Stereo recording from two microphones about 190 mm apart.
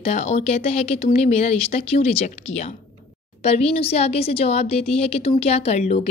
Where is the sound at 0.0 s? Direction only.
35° left (ahead or behind).